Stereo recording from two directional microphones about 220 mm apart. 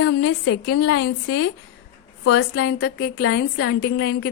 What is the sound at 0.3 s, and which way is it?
Speech, 50° left (ahead or behind).